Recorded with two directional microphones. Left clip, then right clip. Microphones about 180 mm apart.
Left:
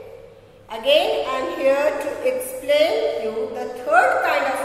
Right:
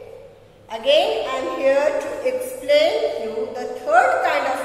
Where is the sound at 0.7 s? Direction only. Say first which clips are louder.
Even; 15° left (ahead or behind).